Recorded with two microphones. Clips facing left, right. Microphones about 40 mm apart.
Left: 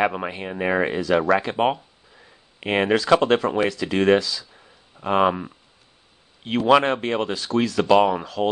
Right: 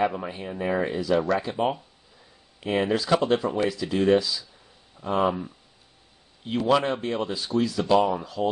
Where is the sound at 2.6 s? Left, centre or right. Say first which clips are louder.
Left 4 dB; left.